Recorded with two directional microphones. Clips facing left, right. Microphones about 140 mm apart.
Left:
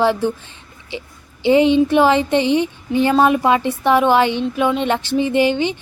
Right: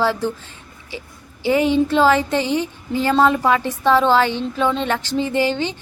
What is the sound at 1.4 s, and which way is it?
A woman's voice, 20° left (ahead or behind).